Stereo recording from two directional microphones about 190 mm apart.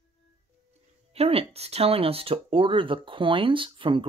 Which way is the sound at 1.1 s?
30° right (ahead or behind).